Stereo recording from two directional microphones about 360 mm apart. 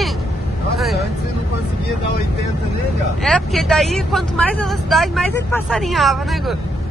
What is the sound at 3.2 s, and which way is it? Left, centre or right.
Speech, centre.